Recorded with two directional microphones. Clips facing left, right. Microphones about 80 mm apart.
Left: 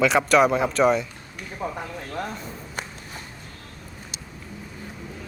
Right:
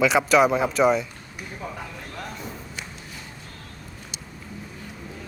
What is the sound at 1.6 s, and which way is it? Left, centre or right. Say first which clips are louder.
Speech: left 6 dB; left.